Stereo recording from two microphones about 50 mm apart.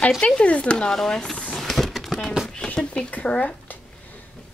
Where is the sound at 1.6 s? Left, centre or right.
Centre.